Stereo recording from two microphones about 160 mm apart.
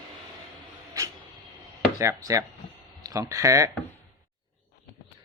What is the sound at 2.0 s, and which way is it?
Speech, 20° right (ahead or behind).